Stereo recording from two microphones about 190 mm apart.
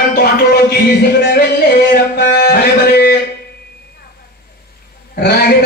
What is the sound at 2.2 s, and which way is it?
Music, 55° left (ahead or behind).